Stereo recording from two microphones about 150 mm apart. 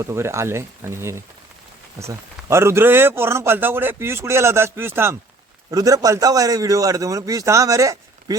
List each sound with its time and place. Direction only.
0.0 s a man's voice: 20° right (ahead or behind)